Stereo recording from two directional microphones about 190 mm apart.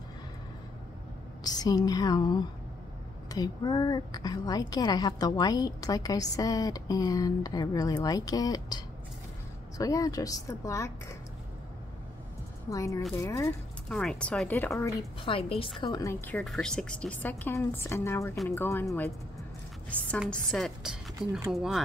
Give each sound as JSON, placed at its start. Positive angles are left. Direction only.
{"t": 1.4, "sound": "a woman's voice", "side_deg": 20}
{"t": 12.6, "sound": "a woman's voice", "side_deg": 15}
{"t": 13.8, "sound": "speech", "side_deg": 5}
{"t": 15.2, "sound": "a woman's voice", "side_deg": 30}
{"t": 20.2, "sound": "speech", "side_deg": 0}